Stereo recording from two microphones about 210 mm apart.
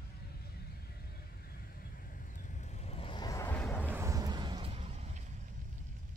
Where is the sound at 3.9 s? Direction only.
15° right (ahead or behind); by 5.2 s 30° right (ahead or behind).